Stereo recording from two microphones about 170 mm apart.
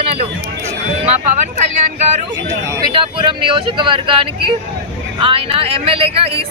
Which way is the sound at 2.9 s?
30° right (ahead or behind).